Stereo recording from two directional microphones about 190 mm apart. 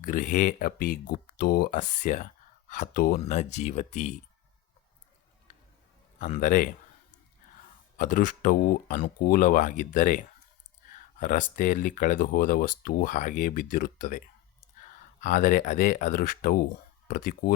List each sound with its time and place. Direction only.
0.0 s speech: 45° left (ahead or behind)
3.2 s speech: 35° left (ahead or behind)
6.1 s speech: 40° left (ahead or behind)
7.9 s speech: 45° left (ahead or behind)
15.2 s speech: 40° left (ahead or behind)